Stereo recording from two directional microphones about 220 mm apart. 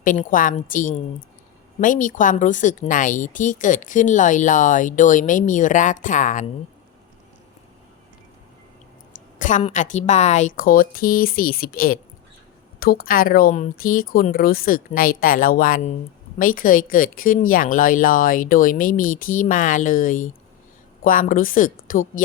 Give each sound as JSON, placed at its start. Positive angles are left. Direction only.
{"t": 0.0, "sound": "speech", "side_deg": 35}
{"t": 9.4, "sound": "speech", "side_deg": 35}